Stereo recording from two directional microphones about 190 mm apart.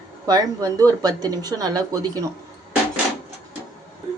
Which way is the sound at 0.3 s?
20° right (ahead or behind).